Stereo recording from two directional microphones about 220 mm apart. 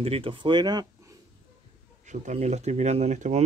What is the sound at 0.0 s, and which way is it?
Speech, 25° right (ahead or behind).